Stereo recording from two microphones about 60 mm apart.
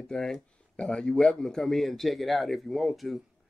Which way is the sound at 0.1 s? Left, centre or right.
Centre.